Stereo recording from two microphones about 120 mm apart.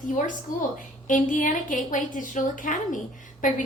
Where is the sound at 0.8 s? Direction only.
90° left.